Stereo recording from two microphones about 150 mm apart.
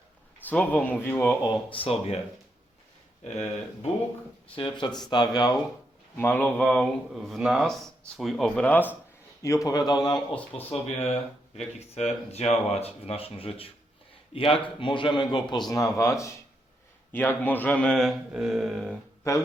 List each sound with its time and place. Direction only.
0.4 s a man's voice: 10° left (ahead or behind)
1.5 s a man's voice: 35° left (ahead or behind)
4.5 s speech: 30° left (ahead or behind)
6.1 s speech: 15° left (ahead or behind)
9.4 s speech: 20° left (ahead or behind)
10.2 s a man's voice: 10° left (ahead or behind)
10.7 s a man's voice: 45° left (ahead or behind); by 18.9 s centre (ahead or behind)
19.3 s speech: 20° left (ahead or behind)